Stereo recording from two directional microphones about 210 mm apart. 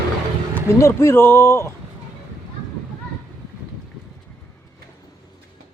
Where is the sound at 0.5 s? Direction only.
10° left (ahead or behind).